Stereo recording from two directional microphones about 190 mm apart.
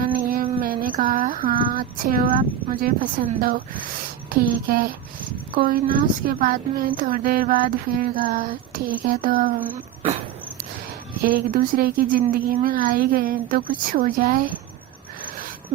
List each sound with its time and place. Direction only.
0.0 s a sound: 50° right (ahead or behind)
1.7 s speech: 50° right (ahead or behind)
9.7 s speech: 35° right (ahead or behind)
11.2 s speech: 50° right (ahead or behind)